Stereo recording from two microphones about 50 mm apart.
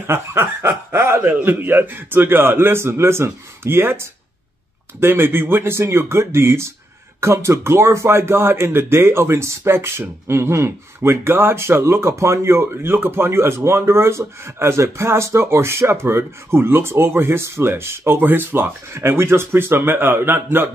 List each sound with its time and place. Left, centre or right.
0.0 s speech: right
1.2 s a man's voice: right